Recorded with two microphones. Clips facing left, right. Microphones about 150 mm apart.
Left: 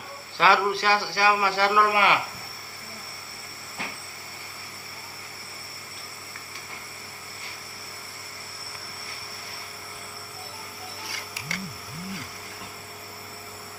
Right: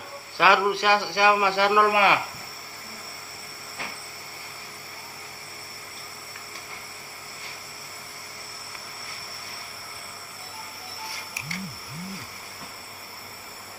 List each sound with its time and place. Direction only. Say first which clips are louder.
0.3 s a man's voice: right 1 dB; 15° right (ahead or behind)